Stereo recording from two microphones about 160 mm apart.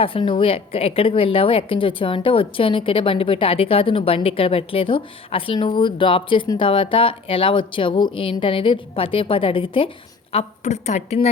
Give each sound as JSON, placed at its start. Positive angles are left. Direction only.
{"t": 0.0, "sound": "a woman's voice", "side_deg": 35}
{"t": 10.3, "sound": "a woman's voice", "side_deg": 45}